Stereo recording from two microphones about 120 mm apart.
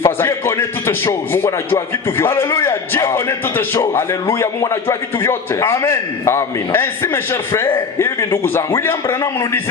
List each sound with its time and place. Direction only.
0.0 s a man's voice: 20° left (ahead or behind)